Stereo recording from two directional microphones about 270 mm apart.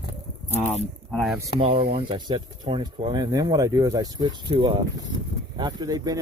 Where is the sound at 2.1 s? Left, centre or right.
Centre.